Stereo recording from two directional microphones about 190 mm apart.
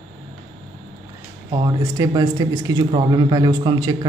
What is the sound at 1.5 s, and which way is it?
Speech, 20° right (ahead or behind).